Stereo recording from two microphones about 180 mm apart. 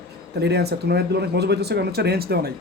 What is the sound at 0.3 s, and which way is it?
Speech, 65° right (ahead or behind).